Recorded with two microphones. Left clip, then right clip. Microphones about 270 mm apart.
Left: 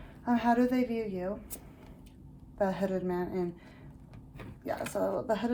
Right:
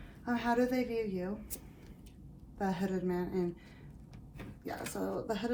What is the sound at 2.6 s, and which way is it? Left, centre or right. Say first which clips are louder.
Speech: left 5 dB; left.